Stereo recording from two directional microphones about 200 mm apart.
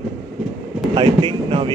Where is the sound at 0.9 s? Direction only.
25° right (ahead or behind).